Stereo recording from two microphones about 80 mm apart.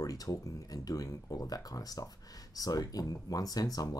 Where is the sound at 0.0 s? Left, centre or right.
Left.